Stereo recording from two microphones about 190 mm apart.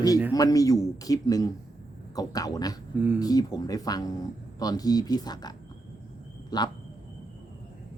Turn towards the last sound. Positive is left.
turn(degrees=20)  # may be behind; listen again after turning